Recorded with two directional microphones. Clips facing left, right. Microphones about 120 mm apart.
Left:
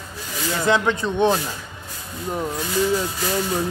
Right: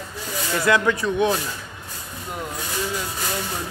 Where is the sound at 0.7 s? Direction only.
25° left (ahead or behind).